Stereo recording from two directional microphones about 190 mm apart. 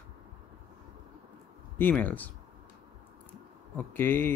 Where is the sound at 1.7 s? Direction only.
10° left (ahead or behind).